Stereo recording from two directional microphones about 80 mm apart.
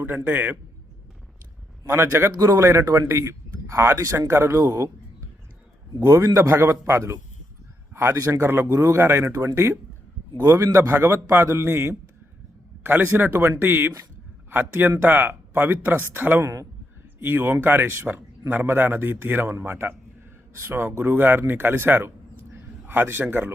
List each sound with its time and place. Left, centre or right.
0.3 s a man's voice: right
1.8 s a man's voice: right
6.0 s a man's voice: right
16.4 s a man's voice: right
17.2 s a man's voice: right